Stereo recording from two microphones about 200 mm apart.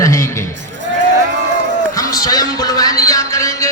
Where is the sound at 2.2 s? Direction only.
20° left (ahead or behind).